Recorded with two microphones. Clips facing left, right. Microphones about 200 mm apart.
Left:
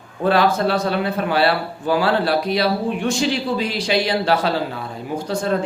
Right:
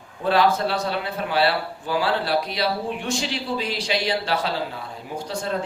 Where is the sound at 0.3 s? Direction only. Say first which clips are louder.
Left 3 dB; 50° left (ahead or behind).